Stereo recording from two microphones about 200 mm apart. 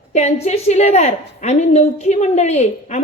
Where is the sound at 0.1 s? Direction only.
35° left (ahead or behind).